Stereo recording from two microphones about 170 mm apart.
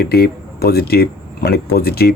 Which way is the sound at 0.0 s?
65° left (ahead or behind).